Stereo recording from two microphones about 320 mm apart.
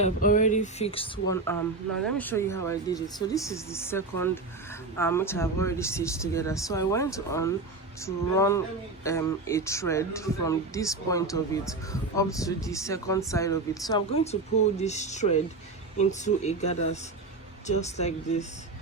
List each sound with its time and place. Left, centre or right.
0.0 s speech: left